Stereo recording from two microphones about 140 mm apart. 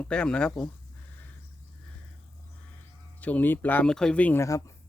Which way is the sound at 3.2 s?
10° left (ahead or behind).